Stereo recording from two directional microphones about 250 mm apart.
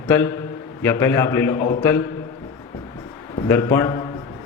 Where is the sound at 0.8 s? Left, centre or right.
Centre.